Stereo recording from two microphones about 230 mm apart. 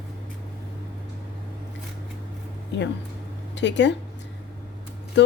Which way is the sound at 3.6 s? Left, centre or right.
Left.